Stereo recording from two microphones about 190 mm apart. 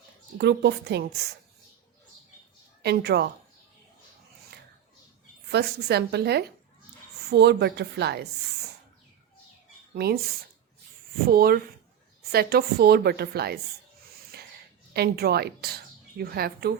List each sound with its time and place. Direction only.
0.3 s a woman's voice: 65° right (ahead or behind)
2.8 s a woman's voice: 60° right (ahead or behind)
5.5 s a woman's voice: 60° right (ahead or behind)
9.9 s speech: 55° right (ahead or behind)
11.3 s a woman's voice: 50° right (ahead or behind)
14.3 s a sound: 55° right (ahead or behind)
14.9 s a woman's voice: 55° right (ahead or behind)